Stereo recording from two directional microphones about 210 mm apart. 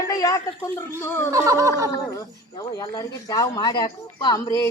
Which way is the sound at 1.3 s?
15° right (ahead or behind).